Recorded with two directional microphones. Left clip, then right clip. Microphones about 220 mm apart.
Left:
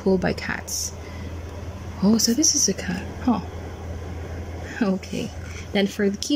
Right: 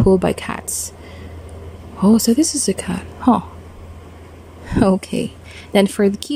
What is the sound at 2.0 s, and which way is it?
A woman's voice, 15° right (ahead or behind).